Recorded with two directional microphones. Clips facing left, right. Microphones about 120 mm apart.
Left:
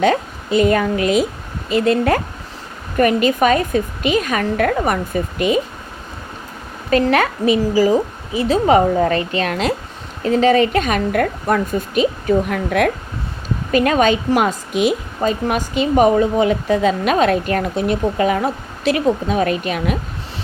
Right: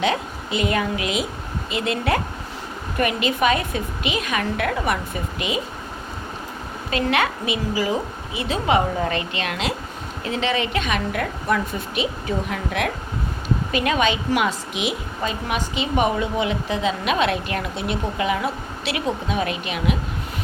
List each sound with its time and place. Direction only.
0.0 s a woman's voice: 45° left (ahead or behind)
6.9 s a woman's voice: 40° left (ahead or behind)